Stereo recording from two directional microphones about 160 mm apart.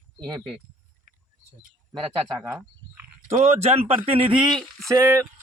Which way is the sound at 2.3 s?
15° right (ahead or behind).